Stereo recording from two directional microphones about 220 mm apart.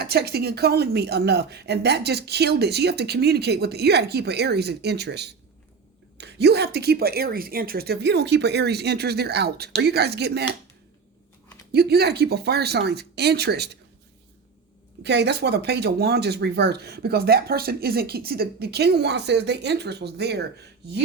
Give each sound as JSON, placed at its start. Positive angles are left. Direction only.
{"t": 0.0, "sound": "speech", "side_deg": -45}
{"t": 11.7, "sound": "speech", "side_deg": -45}
{"t": 15.0, "sound": "speech", "side_deg": -50}